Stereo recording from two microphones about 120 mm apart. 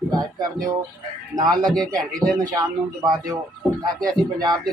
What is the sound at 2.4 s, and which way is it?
Speech, 35° right (ahead or behind).